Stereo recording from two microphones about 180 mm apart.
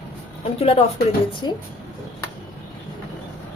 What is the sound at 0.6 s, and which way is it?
Speech, 35° left (ahead or behind).